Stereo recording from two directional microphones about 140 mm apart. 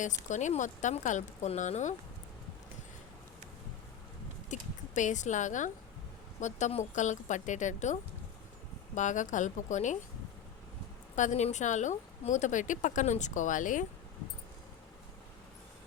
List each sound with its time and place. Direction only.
0.0 s speech: 60° left (ahead or behind)
4.4 s speech: 60° left (ahead or behind)
9.0 s speech: 60° left (ahead or behind)
11.1 s speech: 60° left (ahead or behind)